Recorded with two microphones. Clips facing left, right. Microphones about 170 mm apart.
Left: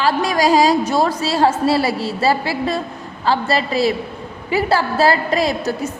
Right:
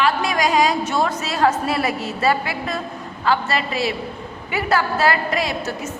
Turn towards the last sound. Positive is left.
turn(degrees=35)  # may be behind; listen again after turning